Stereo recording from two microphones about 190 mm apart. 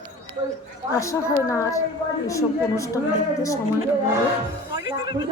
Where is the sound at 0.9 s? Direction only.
15° left (ahead or behind).